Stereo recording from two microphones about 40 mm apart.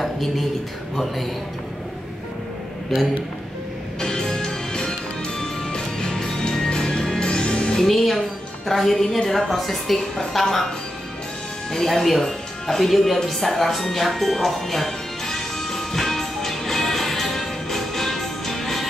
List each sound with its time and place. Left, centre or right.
0.0 s a sound: centre
4.0 s music: centre
7.8 s a woman's voice: centre
9.5 s a woman's voice: centre
11.7 s music: centre